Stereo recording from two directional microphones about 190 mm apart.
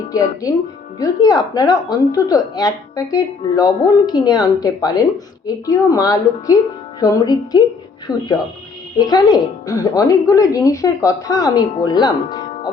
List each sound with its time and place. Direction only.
0.1 s a woman's voice: 20° left (ahead or behind)